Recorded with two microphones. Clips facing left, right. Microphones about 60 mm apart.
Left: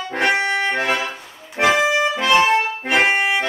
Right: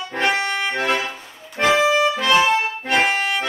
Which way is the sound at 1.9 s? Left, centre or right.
Centre.